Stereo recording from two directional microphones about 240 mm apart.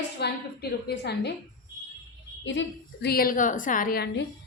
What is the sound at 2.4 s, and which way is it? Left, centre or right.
A woman's voice, left.